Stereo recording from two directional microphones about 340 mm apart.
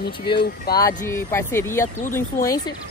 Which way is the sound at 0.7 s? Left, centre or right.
Centre.